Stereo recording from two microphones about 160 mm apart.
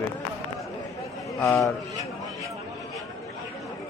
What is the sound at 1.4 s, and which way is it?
Speech, 20° left (ahead or behind).